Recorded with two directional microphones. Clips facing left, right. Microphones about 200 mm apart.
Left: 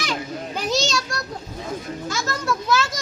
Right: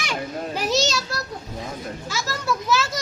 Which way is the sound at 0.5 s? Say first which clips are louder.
Even; 5° right (ahead or behind).